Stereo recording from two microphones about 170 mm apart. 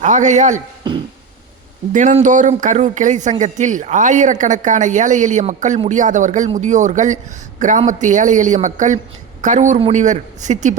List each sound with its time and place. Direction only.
0.0 s a man's voice: 45° right (ahead or behind)
1.9 s a man's voice: 50° right (ahead or behind)